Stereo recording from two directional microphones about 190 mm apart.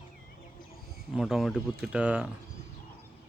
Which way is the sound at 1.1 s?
Centre (ahead or behind).